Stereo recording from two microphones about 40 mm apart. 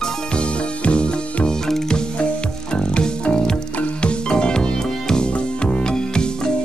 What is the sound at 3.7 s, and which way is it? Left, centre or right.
Music, left.